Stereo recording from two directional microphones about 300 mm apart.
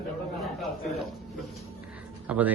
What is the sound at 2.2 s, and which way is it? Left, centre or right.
Speech, centre.